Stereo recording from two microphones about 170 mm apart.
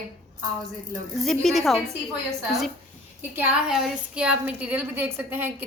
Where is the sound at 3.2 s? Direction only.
10° right (ahead or behind).